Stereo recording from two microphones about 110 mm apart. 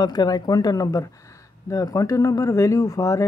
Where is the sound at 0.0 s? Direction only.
35° left (ahead or behind).